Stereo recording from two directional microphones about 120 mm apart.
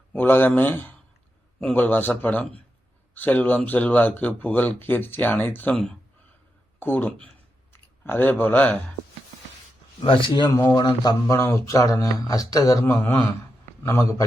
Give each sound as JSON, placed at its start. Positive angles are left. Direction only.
{"t": 0.1, "sound": "speech", "side_deg": 15}
{"t": 10.0, "sound": "speech", "side_deg": 45}
{"t": 11.0, "sound": "speech", "side_deg": 25}
{"t": 12.8, "sound": "speech", "side_deg": 20}